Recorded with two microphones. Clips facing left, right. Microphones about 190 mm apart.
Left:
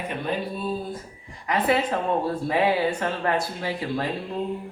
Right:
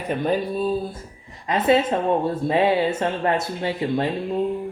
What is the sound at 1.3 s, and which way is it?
Speech, 25° right (ahead or behind).